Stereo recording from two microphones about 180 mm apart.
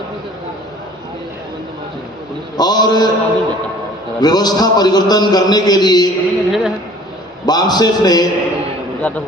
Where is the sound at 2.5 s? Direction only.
20° left (ahead or behind).